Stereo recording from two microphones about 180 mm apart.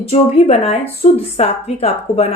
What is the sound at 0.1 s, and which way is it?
A woman's voice, 35° left (ahead or behind).